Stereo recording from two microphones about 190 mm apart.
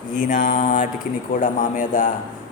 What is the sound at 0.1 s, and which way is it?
A man's voice, 40° left (ahead or behind).